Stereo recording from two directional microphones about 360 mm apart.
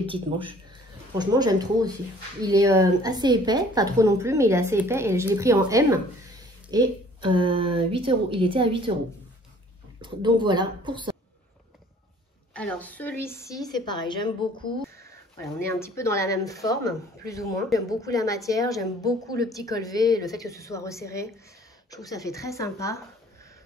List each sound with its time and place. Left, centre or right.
0.0 s a woman's voice: centre
10.0 s a woman's voice: centre
12.5 s a woman's voice: centre